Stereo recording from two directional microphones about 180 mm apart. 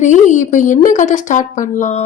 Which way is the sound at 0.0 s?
40° left (ahead or behind).